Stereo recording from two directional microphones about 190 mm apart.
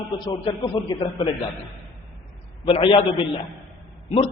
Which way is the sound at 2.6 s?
25° left (ahead or behind).